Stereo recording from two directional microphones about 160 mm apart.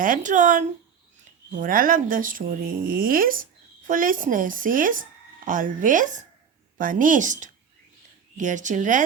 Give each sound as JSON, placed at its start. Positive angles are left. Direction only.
{"t": 0.0, "sound": "speech", "side_deg": -55}